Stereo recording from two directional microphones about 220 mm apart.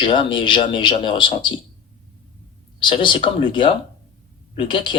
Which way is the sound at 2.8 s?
20° left (ahead or behind).